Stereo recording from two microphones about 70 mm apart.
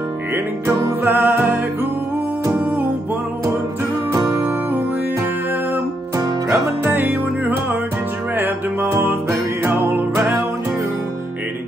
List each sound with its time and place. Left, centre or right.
1.0 s music: right
6.1 s music: right